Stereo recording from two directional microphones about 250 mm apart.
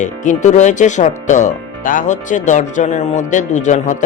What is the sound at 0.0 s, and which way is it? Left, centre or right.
Speech, left.